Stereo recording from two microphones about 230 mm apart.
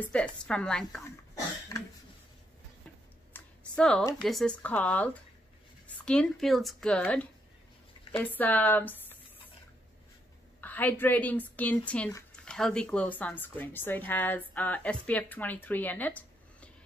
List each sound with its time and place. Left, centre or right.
0.0 s speech: centre
1.7 s cough: centre
3.3 s a sound: centre
4.2 s speech: centre
10.6 s speech: centre